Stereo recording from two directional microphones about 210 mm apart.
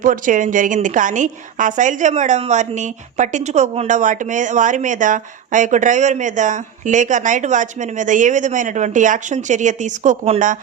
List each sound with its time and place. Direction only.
0.0 s a woman's voice: 40° right (ahead or behind)